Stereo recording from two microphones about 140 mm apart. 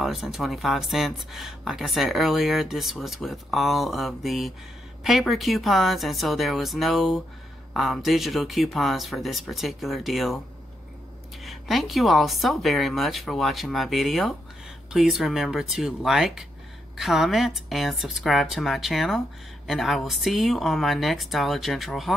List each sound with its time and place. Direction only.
0.0 s speech: centre (ahead or behind)
11.4 s speech: centre (ahead or behind)